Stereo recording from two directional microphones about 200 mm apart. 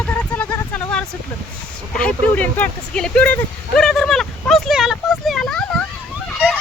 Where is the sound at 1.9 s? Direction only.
5° left (ahead or behind).